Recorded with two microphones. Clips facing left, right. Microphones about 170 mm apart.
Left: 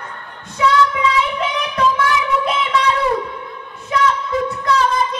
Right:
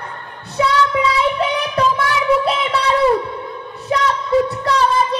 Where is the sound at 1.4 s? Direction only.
35° right (ahead or behind).